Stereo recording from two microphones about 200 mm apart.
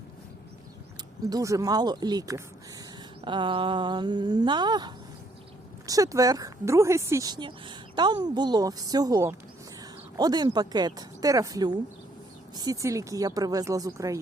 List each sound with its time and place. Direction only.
1.3 s speech: 15° right (ahead or behind)